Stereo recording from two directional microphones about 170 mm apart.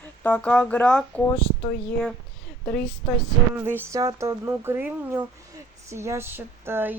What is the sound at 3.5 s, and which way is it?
Speech, 10° right (ahead or behind).